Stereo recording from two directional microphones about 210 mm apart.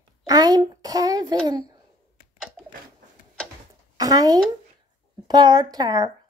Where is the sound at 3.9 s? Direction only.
20° right (ahead or behind).